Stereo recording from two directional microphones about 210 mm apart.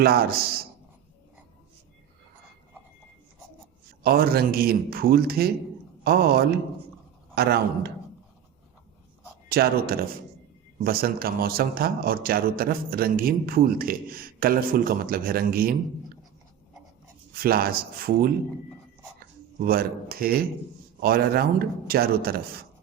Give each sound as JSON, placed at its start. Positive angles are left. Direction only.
{"t": 0.0, "sound": "a man's voice", "side_deg": -45}
{"t": 4.0, "sound": "a man's voice", "side_deg": -45}
{"t": 9.5, "sound": "a man's voice", "side_deg": -45}
{"t": 17.3, "sound": "a man's voice", "side_deg": -45}
{"t": 19.5, "sound": "a man's voice", "side_deg": -45}